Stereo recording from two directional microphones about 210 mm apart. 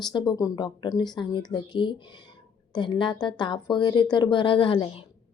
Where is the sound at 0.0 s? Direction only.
20° left (ahead or behind).